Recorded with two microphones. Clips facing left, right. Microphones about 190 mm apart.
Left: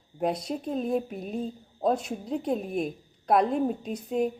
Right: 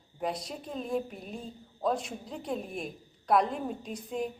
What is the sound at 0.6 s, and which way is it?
A woman's voice, 45° left (ahead or behind).